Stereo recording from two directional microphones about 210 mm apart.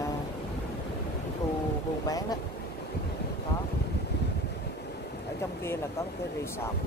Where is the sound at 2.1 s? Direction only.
15° left (ahead or behind).